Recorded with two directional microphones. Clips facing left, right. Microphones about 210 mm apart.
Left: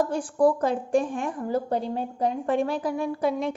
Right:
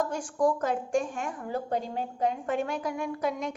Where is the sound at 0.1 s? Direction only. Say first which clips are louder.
Left 5 dB; 35° left (ahead or behind).